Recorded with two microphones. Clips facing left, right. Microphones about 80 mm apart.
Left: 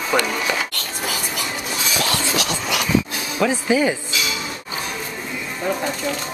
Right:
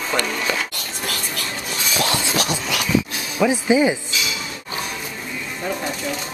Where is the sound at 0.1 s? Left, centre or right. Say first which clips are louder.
Left 4 dB; centre.